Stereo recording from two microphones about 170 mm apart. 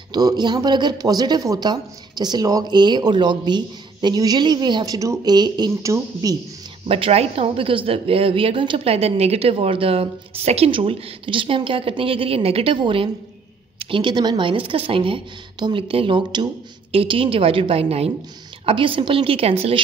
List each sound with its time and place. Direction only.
0.1 s speech: 25° right (ahead or behind)
6.9 s a woman's voice: 35° right (ahead or behind)